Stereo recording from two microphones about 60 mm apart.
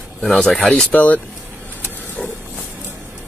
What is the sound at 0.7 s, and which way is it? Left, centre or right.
Speech, left.